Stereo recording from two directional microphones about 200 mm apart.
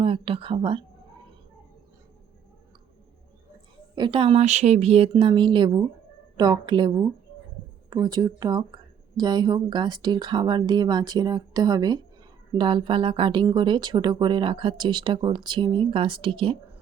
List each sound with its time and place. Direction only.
0.0 s speech: 25° right (ahead or behind)
3.9 s speech: 25° right (ahead or behind)